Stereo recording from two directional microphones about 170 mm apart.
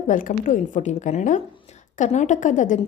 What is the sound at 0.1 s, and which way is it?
A woman's voice, 55° left (ahead or behind).